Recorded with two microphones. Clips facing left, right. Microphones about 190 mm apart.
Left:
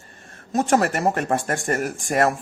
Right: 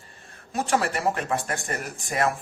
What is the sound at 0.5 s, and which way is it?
Speech, 45° left (ahead or behind).